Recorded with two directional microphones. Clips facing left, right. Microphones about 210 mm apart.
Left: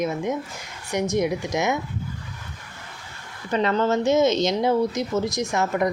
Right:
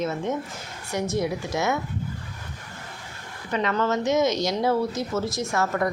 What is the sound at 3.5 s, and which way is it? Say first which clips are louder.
A woman's voice: left 3 dB; 30° left (ahead or behind).